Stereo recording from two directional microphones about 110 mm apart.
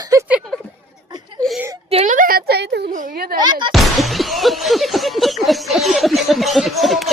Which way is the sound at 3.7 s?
Centre (ahead or behind).